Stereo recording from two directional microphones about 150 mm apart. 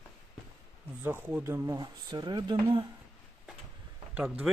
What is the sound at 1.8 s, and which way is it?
A man's voice, 30° right (ahead or behind).